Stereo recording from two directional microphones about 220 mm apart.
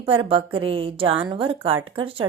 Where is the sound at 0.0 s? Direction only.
25° right (ahead or behind).